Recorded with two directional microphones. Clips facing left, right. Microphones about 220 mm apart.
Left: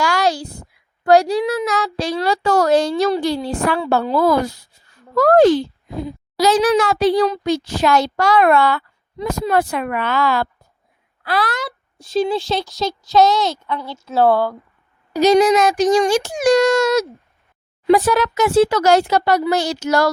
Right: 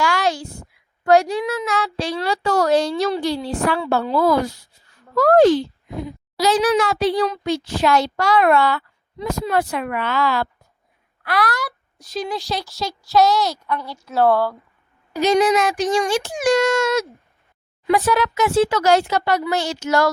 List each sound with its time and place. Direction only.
0.0 s a child's voice: 35° left (ahead or behind)
5.9 s speech: 30° left (ahead or behind)
6.4 s a child's voice: 45° left (ahead or behind)
11.2 s speech: 30° left (ahead or behind)
15.1 s speech: 40° left (ahead or behind)